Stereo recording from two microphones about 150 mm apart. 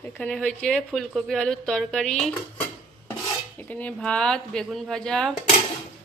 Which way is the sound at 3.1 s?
10° left (ahead or behind).